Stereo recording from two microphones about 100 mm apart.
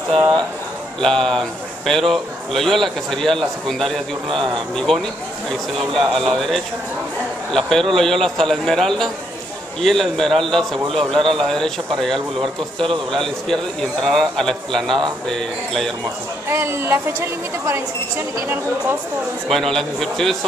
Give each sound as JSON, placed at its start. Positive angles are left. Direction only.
{"t": 1.0, "sound": "a man's voice", "side_deg": 5}
{"t": 13.1, "sound": "a man's voice", "side_deg": 5}
{"t": 16.4, "sound": "a woman's voice", "side_deg": -25}
{"t": 19.5, "sound": "a man's voice", "side_deg": 5}